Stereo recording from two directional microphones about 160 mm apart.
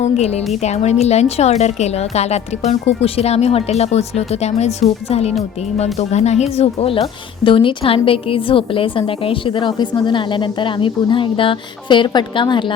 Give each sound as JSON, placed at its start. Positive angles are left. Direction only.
{"t": 0.0, "sound": "a woman's voice", "side_deg": 40}